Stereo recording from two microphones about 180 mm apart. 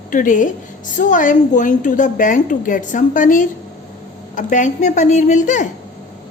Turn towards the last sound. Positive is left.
turn(degrees=40)  # may be behind; listen again after turning